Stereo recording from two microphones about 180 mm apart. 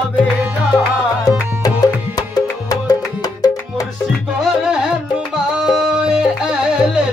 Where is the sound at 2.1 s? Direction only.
20° left (ahead or behind).